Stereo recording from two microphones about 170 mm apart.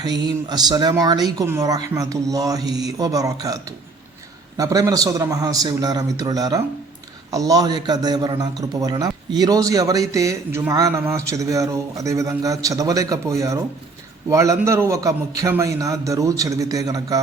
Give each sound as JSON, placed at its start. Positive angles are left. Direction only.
{"t": 0.0, "sound": "a man's voice", "side_deg": -25}
{"t": 2.6, "sound": "speech", "side_deg": -85}
{"t": 3.0, "sound": "a man's voice", "side_deg": -20}